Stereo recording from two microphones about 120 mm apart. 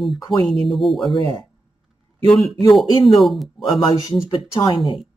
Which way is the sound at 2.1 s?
5° left (ahead or behind).